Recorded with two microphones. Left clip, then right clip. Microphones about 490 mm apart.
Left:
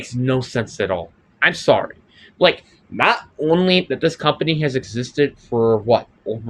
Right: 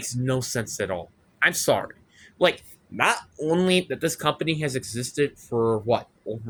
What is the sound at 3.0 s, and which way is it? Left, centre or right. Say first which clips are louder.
Speech: left 6 dB; right.